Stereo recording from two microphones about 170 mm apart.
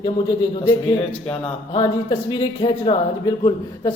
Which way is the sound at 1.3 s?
30° left (ahead or behind).